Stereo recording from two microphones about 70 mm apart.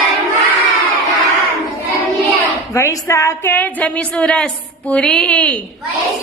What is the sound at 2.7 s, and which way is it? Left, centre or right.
Speech, left.